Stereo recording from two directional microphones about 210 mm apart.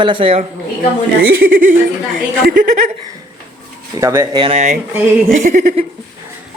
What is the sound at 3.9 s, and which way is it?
A man's voice, 15° right (ahead or behind).